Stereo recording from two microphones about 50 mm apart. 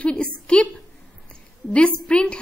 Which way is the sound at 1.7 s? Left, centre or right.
Left.